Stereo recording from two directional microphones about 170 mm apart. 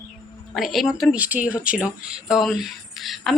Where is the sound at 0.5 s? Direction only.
Centre (ahead or behind).